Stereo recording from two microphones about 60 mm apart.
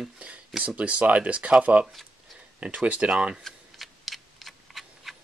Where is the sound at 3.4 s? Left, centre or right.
Centre.